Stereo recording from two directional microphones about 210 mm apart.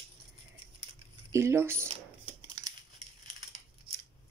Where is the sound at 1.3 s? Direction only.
15° right (ahead or behind).